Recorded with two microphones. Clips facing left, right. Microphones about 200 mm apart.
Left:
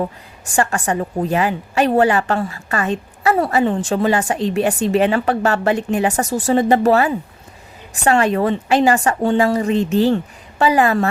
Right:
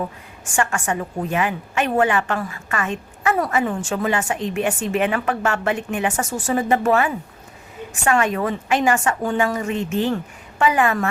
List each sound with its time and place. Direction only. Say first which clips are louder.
0.0 s a woman's voice: left 5 dB; 35° left (ahead or behind)